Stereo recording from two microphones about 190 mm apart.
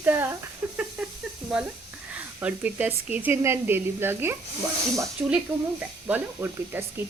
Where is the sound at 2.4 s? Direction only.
10° right (ahead or behind).